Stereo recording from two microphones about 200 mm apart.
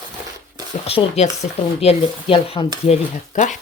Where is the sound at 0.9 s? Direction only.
30° left (ahead or behind).